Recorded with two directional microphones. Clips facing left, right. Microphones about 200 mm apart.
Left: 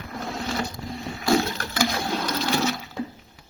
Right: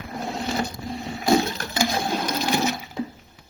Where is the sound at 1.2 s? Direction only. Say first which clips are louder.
Right 2 dB; 20° right (ahead or behind).